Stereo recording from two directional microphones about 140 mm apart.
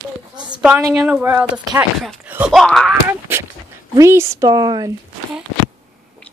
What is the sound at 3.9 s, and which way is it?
A woman's voice, 20° right (ahead or behind).